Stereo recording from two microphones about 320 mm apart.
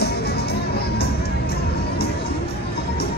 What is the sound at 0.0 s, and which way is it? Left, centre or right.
Music, left.